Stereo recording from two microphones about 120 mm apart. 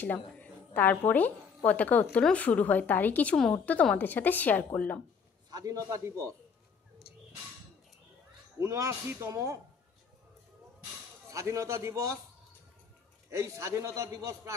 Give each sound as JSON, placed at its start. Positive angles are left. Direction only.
{"t": 0.0, "sound": "a woman's voice", "side_deg": 15}
{"t": 5.5, "sound": "a man's voice", "side_deg": -30}
{"t": 8.5, "sound": "a man's voice", "side_deg": -25}
{"t": 11.2, "sound": "a man's voice", "side_deg": -25}
{"t": 13.3, "sound": "a man's voice", "side_deg": -25}